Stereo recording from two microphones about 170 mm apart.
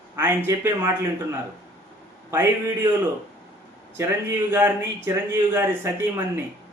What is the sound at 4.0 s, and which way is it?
Speech, 15° right (ahead or behind).